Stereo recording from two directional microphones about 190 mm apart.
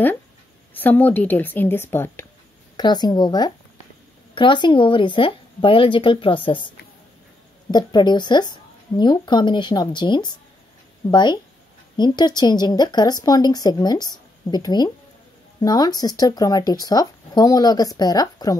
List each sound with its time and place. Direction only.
0.7 s a woman's voice: 10° left (ahead or behind)
2.8 s speech: 20° left (ahead or behind)
7.7 s speech: 25° left (ahead or behind)